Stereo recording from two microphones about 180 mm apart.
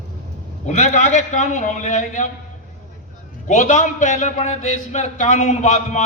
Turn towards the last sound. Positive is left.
turn(degrees=40)  # may be behind; listen again after turning